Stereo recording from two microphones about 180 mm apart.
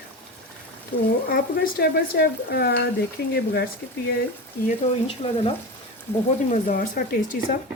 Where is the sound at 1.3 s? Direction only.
60° left (ahead or behind).